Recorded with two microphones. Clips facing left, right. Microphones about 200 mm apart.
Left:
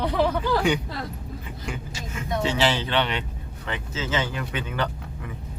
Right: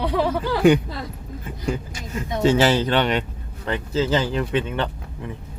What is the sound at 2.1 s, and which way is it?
Speech, 40° right (ahead or behind).